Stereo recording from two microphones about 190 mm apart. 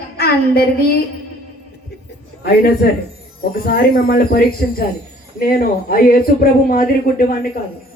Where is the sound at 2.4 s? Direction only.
55° left (ahead or behind).